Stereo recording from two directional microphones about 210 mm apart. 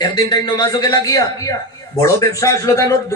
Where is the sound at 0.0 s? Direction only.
20° left (ahead or behind).